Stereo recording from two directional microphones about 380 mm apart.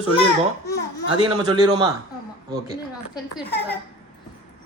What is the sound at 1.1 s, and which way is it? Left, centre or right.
Speech, centre.